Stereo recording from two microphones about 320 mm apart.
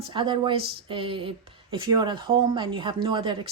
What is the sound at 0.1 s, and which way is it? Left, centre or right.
A woman's voice, centre.